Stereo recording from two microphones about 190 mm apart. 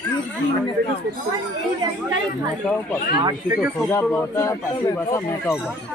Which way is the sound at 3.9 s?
15° left (ahead or behind).